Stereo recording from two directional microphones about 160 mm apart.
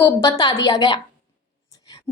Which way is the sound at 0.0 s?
25° left (ahead or behind).